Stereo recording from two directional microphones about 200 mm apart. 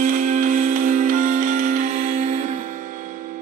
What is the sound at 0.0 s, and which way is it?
Music, 45° right (ahead or behind).